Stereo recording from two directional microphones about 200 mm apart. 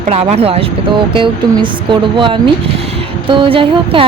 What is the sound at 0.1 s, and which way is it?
Speech, 30° right (ahead or behind).